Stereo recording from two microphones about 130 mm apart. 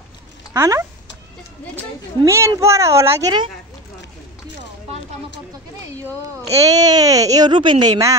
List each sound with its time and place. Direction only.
0.5 s speech: 20° right (ahead or behind)
2.2 s speech: 20° right (ahead or behind)
6.5 s speech: 25° right (ahead or behind)